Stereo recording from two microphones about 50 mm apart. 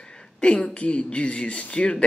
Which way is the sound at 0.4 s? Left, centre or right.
Left.